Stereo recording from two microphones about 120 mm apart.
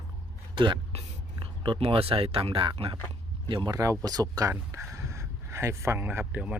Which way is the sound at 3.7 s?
25° right (ahead or behind).